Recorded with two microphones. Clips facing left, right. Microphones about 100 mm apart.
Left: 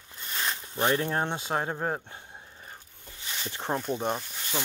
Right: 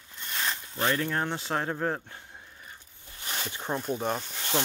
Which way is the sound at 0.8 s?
25° left (ahead or behind).